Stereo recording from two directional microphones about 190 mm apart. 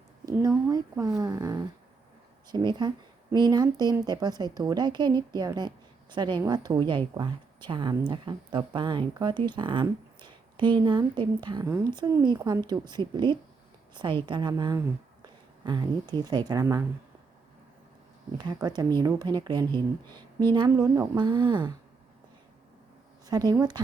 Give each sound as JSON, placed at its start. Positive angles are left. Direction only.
{"t": 0.3, "sound": "a woman's voice", "side_deg": -20}
{"t": 18.3, "sound": "a woman's voice", "side_deg": -25}
{"t": 23.2, "sound": "a woman's voice", "side_deg": -20}